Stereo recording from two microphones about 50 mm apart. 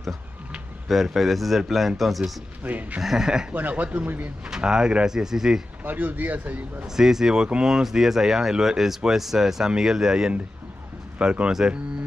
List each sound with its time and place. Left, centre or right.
0.8 s a man's voice: centre
2.6 s a man's voice: right
3.0 s speech: centre
3.5 s a man's voice: right
4.5 s speech: centre
5.9 s a man's voice: right
7.0 s speech: centre